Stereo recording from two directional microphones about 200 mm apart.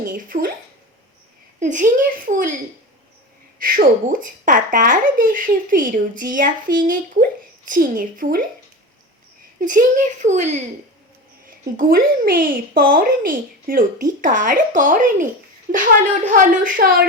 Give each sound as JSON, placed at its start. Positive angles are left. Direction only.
{"t": 0.0, "sound": "speech", "side_deg": -45}
{"t": 1.5, "sound": "a woman's voice", "side_deg": -40}
{"t": 3.6, "sound": "speech", "side_deg": -45}
{"t": 9.6, "sound": "a woman's voice", "side_deg": -40}
{"t": 11.6, "sound": "a woman's voice", "side_deg": -45}